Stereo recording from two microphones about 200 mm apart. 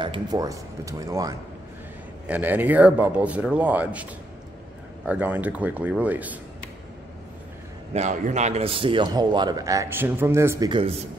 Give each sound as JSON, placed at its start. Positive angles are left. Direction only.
{"t": 0.0, "sound": "speech", "side_deg": -20}
{"t": 7.9, "sound": "a man's voice", "side_deg": -35}